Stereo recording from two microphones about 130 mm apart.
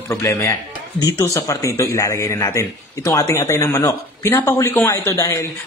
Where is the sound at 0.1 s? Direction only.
25° left (ahead or behind).